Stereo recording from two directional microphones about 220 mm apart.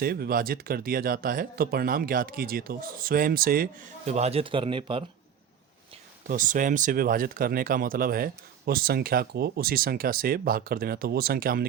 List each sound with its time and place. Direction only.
0.0 s speech: 45° right (ahead or behind); by 5.0 s 25° right (ahead or behind)
6.2 s speech: 35° right (ahead or behind)